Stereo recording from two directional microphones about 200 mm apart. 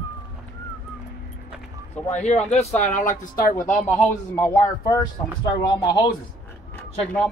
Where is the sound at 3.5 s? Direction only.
15° left (ahead or behind).